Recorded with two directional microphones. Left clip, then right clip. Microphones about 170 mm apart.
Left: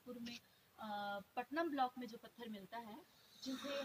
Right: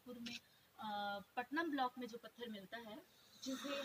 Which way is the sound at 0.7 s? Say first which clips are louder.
Right 1 dB; 35° left (ahead or behind).